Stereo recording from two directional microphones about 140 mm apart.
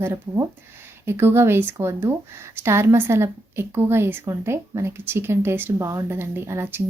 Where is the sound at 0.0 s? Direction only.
15° right (ahead or behind).